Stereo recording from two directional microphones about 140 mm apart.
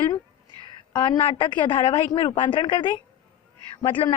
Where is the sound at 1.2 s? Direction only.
40° left (ahead or behind).